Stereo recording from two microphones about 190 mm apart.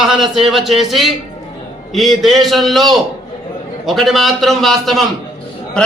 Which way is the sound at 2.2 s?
Centre (ahead or behind).